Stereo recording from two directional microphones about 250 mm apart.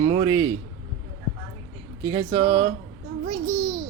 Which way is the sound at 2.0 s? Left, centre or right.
Centre.